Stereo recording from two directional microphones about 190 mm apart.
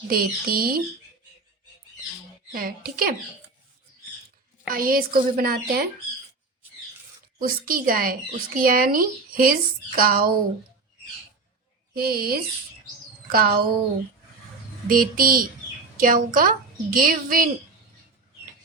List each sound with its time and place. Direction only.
0.1 s speech: 50° right (ahead or behind)
2.5 s speech: 50° right (ahead or behind)
4.7 s speech: 50° right (ahead or behind)
7.3 s speech: 45° right (ahead or behind)
11.9 s speech: 50° right (ahead or behind)
14.8 s speech: 45° right (ahead or behind)